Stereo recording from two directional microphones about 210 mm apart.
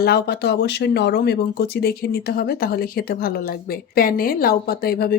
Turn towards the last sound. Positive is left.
turn(degrees=45)  # may be behind; listen again after turning